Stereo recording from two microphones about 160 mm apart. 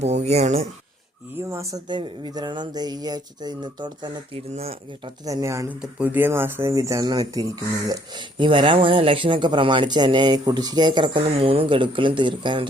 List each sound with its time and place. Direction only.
0.0 s speech: 45° right (ahead or behind)
1.4 s speech: 15° right (ahead or behind)
4.5 s speech: 40° right (ahead or behind)
5.2 s speech: 20° right (ahead or behind)